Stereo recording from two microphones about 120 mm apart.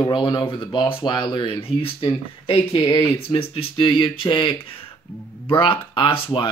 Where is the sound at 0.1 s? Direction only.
35° left (ahead or behind).